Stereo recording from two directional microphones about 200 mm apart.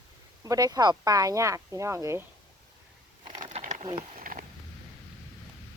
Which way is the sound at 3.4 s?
35° right (ahead or behind).